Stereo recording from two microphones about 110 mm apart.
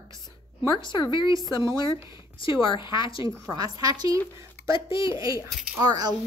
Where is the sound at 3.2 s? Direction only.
30° right (ahead or behind).